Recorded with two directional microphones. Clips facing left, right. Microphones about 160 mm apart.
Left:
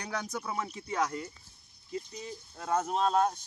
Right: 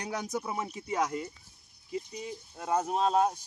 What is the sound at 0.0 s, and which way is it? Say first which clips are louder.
Speech: right 2 dB; 20° right (ahead or behind).